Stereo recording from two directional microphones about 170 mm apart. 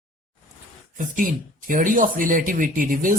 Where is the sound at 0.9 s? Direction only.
55° right (ahead or behind).